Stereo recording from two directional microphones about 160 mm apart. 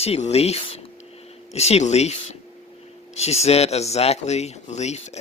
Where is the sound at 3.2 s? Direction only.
40° left (ahead or behind).